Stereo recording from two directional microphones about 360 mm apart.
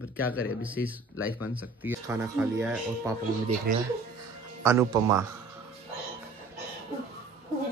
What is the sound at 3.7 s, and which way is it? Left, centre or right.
Speech, right.